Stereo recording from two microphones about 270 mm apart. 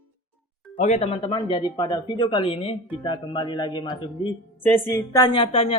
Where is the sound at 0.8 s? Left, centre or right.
Left.